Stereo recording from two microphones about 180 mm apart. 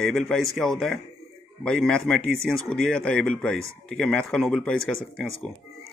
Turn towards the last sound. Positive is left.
turn(degrees=5)  # may be behind; listen again after turning